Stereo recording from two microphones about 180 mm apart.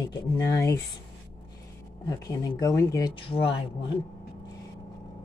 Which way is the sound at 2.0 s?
20° left (ahead or behind).